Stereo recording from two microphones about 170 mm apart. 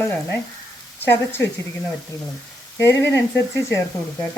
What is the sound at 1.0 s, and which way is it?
Speech, 10° left (ahead or behind).